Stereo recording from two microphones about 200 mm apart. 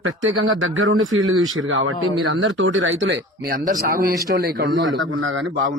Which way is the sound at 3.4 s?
45° right (ahead or behind).